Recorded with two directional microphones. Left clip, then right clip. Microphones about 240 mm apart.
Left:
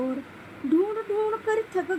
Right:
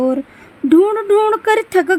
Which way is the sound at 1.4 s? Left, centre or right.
Right.